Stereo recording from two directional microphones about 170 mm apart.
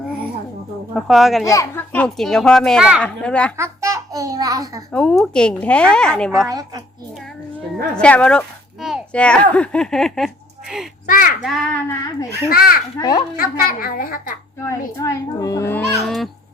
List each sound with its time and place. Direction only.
0.9 s a woman's voice: centre (ahead or behind)
1.5 s a child's voice: 20° left (ahead or behind)
1.9 s a woman's voice: 5° left (ahead or behind)
3.6 s a child's voice: 15° right (ahead or behind)
4.9 s a woman's voice: 5° left (ahead or behind)
6.5 s a woman's voice: 20° right (ahead or behind)
7.9 s speech: 5° left (ahead or behind)
11.0 s a child's voice: 55° left (ahead or behind)
11.4 s a woman's voice: 5° left (ahead or behind)
12.5 s a child's voice: 65° left (ahead or behind)
13.0 s a child's voice: 20° left (ahead or behind)
13.3 s a child's voice: 60° left (ahead or behind)
14.6 s a child's voice: 15° left (ahead or behind)
15.8 s a woman's voice: centre (ahead or behind)